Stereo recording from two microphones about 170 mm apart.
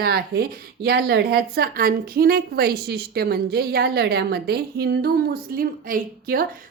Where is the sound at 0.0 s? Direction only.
65° right (ahead or behind).